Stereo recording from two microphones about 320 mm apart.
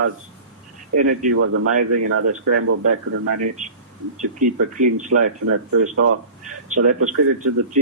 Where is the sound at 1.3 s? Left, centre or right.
Right.